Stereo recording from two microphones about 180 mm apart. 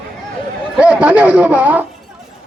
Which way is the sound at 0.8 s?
5° right (ahead or behind).